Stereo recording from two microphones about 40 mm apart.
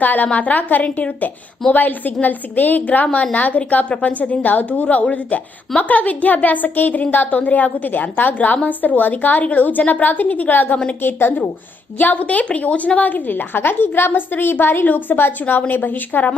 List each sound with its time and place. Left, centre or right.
0.0 s a woman's voice: left
1.7 s a woman's voice: left
11.0 s a woman's voice: left
12.1 s a woman's voice: left
13.6 s a woman's voice: left